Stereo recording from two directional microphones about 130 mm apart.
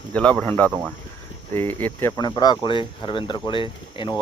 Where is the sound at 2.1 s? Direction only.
30° left (ahead or behind).